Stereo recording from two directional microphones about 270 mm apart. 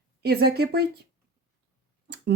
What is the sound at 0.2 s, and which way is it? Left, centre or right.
Speech, right.